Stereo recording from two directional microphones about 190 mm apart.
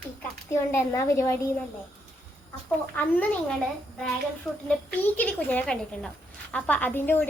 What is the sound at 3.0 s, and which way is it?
Speech, 10° left (ahead or behind).